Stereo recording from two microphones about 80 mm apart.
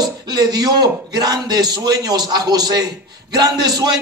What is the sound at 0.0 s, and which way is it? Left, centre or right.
A man's voice, right.